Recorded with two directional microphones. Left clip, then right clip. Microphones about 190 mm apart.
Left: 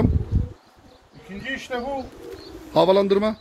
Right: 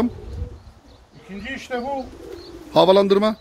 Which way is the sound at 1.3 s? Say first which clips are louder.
Even; 5° left (ahead or behind).